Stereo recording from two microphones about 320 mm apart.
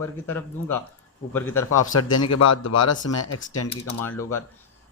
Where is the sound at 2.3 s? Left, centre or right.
Left.